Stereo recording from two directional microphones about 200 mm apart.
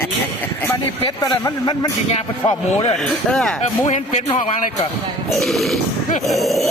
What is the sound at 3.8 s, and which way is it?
Speech, 30° left (ahead or behind).